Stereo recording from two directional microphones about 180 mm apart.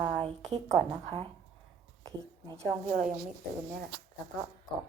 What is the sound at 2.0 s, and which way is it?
Speech, 20° right (ahead or behind).